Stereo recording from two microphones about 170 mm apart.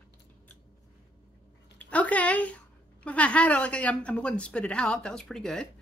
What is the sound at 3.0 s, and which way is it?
Speech, 5° left (ahead or behind).